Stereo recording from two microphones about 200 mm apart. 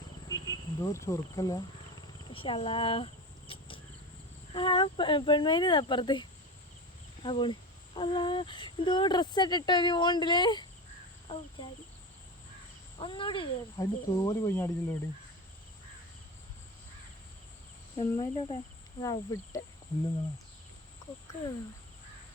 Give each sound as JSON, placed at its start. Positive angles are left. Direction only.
{"t": 0.3, "sound": "insect", "side_deg": 15}
{"t": 4.5, "sound": "speech", "side_deg": 25}
{"t": 13.0, "sound": "speech", "side_deg": 25}
{"t": 17.9, "sound": "speech", "side_deg": 25}